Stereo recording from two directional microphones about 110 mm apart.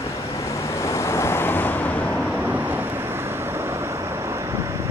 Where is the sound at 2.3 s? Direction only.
10° right (ahead or behind).